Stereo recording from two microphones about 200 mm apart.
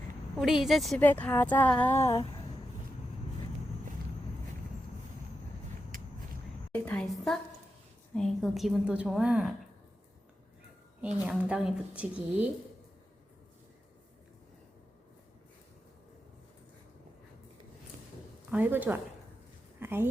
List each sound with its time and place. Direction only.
0.3 s a woman's voice: centre (ahead or behind); by 2.2 s 15° left (ahead or behind)
5.9 s walk: 45° right (ahead or behind)
6.7 s a woman's voice: 5° left (ahead or behind)
11.0 s a woman's voice: 5° right (ahead or behind)
18.5 s a woman's voice: 10° right (ahead or behind)
19.8 s a sound: 10° right (ahead or behind)